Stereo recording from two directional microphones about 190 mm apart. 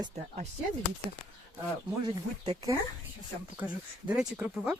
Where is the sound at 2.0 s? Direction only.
20° right (ahead or behind).